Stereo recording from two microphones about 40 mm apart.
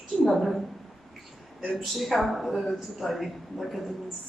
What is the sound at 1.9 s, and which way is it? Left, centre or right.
Speech, centre.